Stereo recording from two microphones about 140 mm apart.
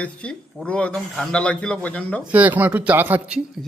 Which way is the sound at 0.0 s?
10° left (ahead or behind).